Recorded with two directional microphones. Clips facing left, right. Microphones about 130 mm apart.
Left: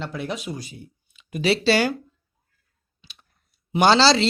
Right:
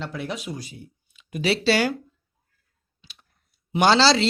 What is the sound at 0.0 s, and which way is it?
Speech, 25° left (ahead or behind).